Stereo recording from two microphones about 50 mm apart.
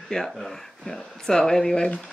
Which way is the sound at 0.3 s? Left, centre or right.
Centre.